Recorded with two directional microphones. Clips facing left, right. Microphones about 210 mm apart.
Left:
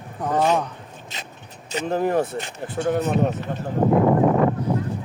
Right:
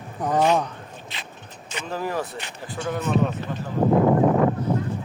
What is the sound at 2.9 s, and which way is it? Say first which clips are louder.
Speech: even; 40° left (ahead or behind).